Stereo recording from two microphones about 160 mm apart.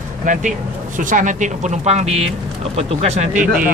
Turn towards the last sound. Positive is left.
turn(degrees=-55)  # may be behind; listen again after turning